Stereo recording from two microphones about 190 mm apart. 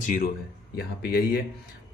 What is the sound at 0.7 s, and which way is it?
Speech, 55° left (ahead or behind).